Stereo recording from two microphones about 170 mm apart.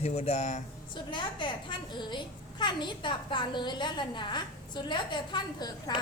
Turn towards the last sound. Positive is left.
turn(degrees=25)  # may be behind; listen again after turning